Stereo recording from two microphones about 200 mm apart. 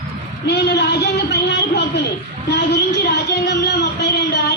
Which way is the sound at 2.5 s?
55° left (ahead or behind).